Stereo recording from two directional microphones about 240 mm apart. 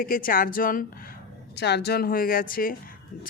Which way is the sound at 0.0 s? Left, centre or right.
Left.